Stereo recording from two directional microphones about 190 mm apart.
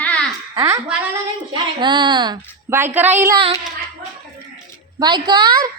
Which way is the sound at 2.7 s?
10° right (ahead or behind).